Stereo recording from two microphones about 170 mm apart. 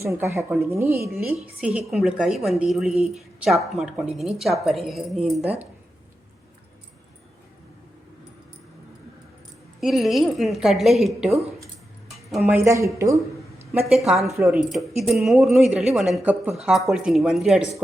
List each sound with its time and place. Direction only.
0.0 s a woman's voice: 15° right (ahead or behind)
1.6 s a woman's voice: 5° right (ahead or behind)
5.4 s speech: 35° right (ahead or behind)
9.8 s a woman's voice: centre (ahead or behind)
12.6 s a woman's voice: 15° right (ahead or behind)
13.8 s a woman's voice: centre (ahead or behind)